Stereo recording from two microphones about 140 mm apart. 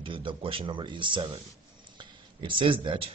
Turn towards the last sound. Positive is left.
turn(degrees=-40)  # may be behind; listen again after turning